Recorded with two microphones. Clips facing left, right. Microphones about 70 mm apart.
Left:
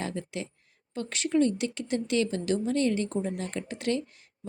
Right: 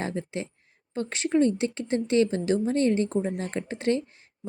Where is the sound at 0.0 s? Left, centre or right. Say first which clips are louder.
Right 3 dB; right.